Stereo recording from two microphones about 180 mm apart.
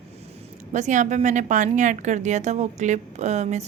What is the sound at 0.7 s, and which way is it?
A woman's voice, 45° right (ahead or behind).